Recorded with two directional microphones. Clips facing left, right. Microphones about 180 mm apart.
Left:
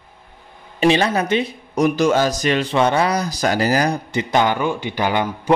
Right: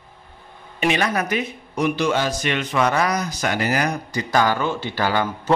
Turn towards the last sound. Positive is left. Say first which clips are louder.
# left 2 dB
turn(degrees=20)  # may be behind; listen again after turning